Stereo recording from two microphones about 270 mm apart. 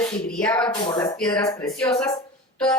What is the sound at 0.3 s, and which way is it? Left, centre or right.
Speech, centre.